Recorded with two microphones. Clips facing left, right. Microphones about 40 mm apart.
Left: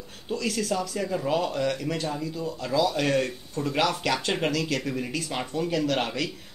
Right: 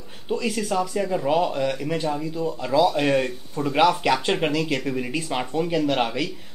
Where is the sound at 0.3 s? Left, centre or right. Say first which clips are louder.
Right 3 dB; centre.